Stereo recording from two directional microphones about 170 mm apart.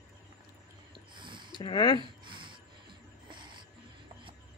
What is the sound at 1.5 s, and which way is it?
Speech, 25° left (ahead or behind).